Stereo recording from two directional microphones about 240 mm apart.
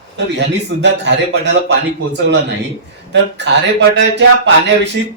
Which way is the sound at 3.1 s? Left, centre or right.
Right.